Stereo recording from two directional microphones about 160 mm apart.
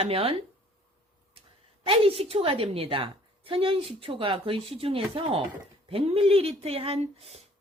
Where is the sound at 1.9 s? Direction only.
35° right (ahead or behind).